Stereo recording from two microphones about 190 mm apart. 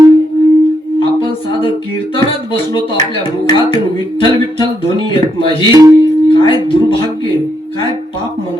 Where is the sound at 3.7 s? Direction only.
25° left (ahead or behind).